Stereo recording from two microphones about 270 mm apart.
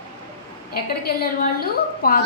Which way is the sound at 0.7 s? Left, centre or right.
Left.